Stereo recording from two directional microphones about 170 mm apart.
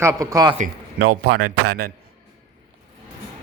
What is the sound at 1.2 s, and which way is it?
Speech, 65° right (ahead or behind).